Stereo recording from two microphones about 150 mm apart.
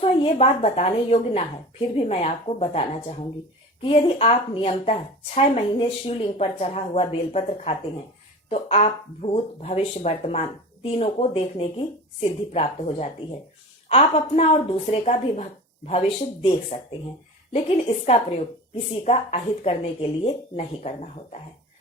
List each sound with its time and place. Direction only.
0.0 s speech: 40° left (ahead or behind)
12.2 s speech: 50° left (ahead or behind)